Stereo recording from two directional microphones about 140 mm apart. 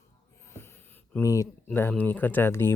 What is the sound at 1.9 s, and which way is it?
Speech, 10° left (ahead or behind).